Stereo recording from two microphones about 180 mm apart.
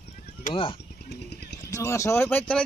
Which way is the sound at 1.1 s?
65° left (ahead or behind).